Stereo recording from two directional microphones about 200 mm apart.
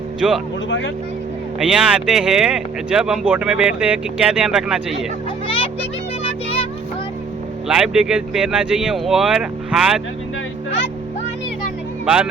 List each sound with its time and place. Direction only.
0.2 s speech: 5° right (ahead or behind)
1.5 s speech: 5° right (ahead or behind)
5.5 s music: 25° left (ahead or behind)
7.7 s speech: 5° right (ahead or behind)
12.0 s speech: 5° right (ahead or behind)